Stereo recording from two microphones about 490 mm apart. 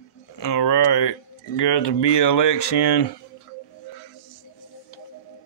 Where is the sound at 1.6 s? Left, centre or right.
Left.